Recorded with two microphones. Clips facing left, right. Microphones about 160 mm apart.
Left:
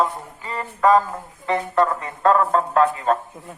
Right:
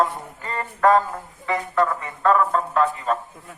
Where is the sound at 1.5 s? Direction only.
25° left (ahead or behind).